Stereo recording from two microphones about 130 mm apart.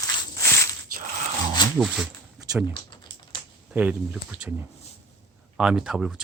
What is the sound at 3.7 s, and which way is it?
Speech, 10° right (ahead or behind).